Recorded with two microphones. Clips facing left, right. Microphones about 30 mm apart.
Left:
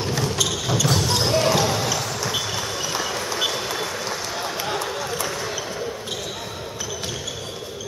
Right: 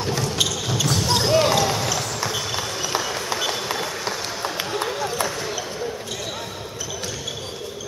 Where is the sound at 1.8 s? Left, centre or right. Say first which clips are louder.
Even; centre.